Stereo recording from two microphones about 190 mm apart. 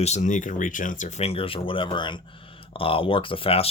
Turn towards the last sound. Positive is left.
turn(degrees=30)  # may be behind; listen again after turning